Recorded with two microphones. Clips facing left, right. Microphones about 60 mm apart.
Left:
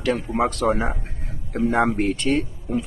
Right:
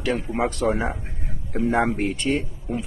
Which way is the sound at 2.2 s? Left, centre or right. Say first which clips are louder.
Left 2 dB; centre.